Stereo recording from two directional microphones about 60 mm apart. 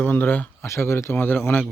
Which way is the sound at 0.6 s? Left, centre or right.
Left.